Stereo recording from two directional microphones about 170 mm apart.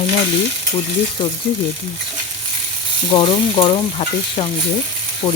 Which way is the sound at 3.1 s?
30° left (ahead or behind).